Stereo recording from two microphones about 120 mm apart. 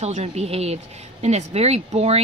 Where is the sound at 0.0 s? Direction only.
65° right (ahead or behind).